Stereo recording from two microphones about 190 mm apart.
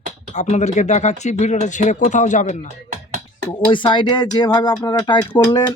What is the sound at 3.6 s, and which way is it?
Speech, 25° left (ahead or behind).